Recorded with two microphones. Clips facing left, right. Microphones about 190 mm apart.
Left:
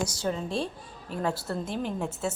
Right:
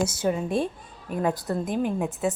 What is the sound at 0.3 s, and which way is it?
A woman's voice, 10° right (ahead or behind).